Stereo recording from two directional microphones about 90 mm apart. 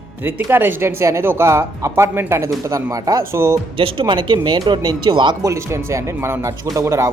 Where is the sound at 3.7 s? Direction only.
75° right (ahead or behind); by 5.4 s 60° right (ahead or behind).